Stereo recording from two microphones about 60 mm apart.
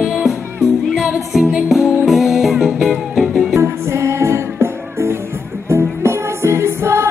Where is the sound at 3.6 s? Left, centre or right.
Right.